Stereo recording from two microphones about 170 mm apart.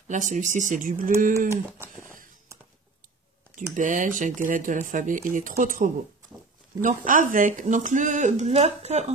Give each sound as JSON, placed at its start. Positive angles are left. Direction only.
{"t": 0.1, "sound": "speech", "side_deg": -45}
{"t": 3.5, "sound": "speech", "side_deg": -50}